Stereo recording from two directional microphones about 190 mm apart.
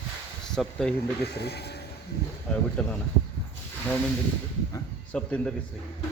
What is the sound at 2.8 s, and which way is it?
Speech, 5° left (ahead or behind).